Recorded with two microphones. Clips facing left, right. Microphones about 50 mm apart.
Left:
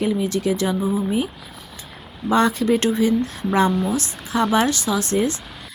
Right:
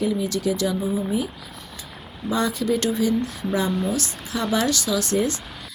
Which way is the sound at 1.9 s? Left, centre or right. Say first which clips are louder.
Left 3 dB; centre.